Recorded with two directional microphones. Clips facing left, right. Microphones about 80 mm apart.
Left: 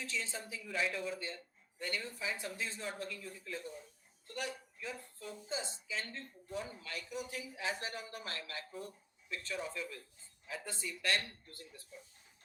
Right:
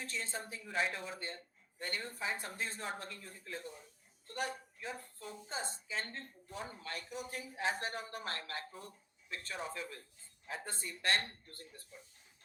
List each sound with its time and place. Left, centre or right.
0.0 s a woman's voice: right